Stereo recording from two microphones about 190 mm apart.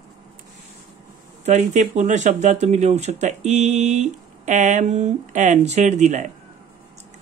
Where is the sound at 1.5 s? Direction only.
40° right (ahead or behind).